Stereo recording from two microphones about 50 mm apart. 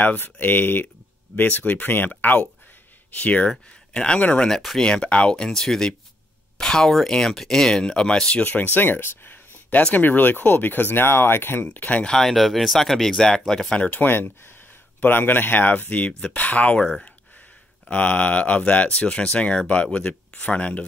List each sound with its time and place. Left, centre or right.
0.0 s speech: left
3.4 s speech: centre
4.6 s speech: centre
4.8 s speech: left
5.5 s speech: centre
8.4 s speech: left
12.2 s speech: centre
13.7 s speech: left
17.8 s speech: left